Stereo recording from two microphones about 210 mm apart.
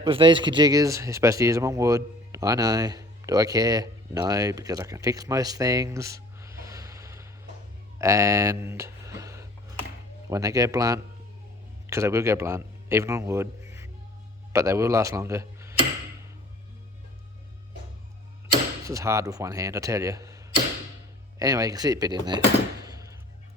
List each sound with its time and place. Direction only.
0.0 s speech: 25° right (ahead or behind)
7.9 s a sound: 15° right (ahead or behind)
10.2 s a man's voice: 15° right (ahead or behind)
18.9 s speech: 15° right (ahead or behind)
22.8 s music: 15° right (ahead or behind)